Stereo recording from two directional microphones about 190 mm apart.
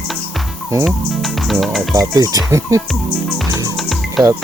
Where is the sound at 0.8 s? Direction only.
Centre (ahead or behind).